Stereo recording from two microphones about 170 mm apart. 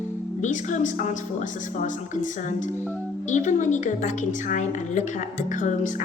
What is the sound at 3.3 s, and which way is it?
A woman's voice, 45° left (ahead or behind).